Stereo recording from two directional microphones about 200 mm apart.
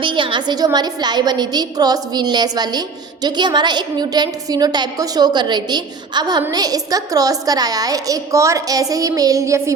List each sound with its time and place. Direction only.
0.0 s a woman's voice: 25° right (ahead or behind)